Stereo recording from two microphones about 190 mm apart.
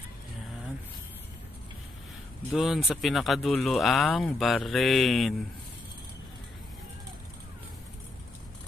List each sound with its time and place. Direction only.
2.5 s speech: centre (ahead or behind)